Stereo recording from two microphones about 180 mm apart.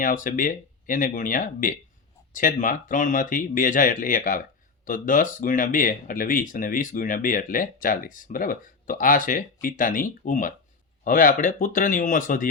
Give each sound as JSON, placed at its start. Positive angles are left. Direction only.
{"t": 0.0, "sound": "speech", "side_deg": 50}